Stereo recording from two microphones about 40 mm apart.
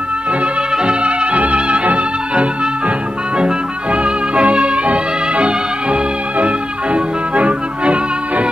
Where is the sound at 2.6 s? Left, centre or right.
Right.